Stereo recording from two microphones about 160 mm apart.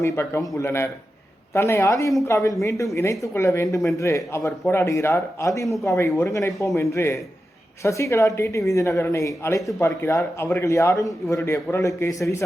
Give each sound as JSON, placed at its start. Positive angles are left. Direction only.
{"t": 0.0, "sound": "a man's voice", "side_deg": 20}